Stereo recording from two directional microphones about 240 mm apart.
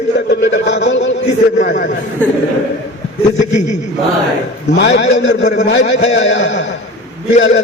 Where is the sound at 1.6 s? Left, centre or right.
Left.